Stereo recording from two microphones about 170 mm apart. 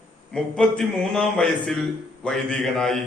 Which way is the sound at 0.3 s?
5° left (ahead or behind).